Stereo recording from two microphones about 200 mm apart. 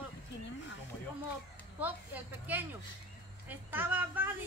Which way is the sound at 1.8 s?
10° right (ahead or behind).